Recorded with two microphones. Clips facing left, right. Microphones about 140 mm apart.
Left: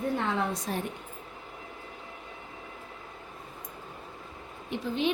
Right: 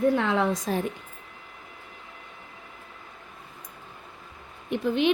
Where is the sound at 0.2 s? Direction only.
90° right.